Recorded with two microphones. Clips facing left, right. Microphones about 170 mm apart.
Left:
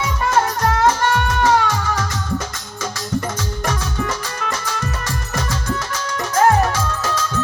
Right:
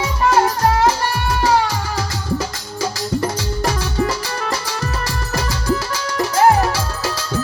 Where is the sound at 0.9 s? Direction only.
35° right (ahead or behind).